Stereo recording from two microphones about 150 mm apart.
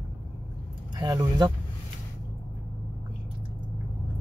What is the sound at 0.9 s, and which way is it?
Speech, 25° right (ahead or behind).